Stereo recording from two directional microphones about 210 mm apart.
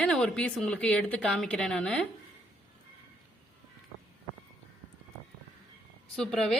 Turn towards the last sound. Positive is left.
turn(degrees=0)  # may be behind; listen again after turning